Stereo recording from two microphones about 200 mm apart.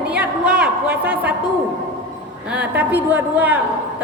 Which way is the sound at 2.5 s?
5° right (ahead or behind).